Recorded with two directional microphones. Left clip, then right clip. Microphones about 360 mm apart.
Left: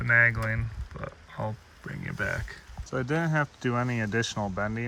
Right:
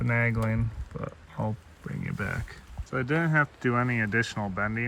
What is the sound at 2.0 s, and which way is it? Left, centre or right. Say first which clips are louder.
Speech: left 3 dB; centre.